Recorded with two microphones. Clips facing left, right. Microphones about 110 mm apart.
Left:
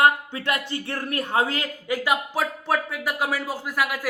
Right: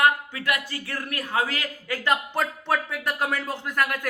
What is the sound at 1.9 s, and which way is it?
Speech, 10° left (ahead or behind).